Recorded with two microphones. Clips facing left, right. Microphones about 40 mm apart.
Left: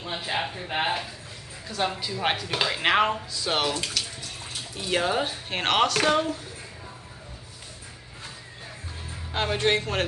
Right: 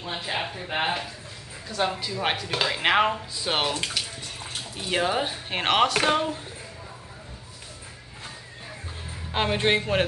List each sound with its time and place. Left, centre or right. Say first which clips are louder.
0.0 s speech: left 1 dB; centre
3.3 s speech: even; centre
4.7 s speech: even; centre
9.3 s speech: right 1 dB; centre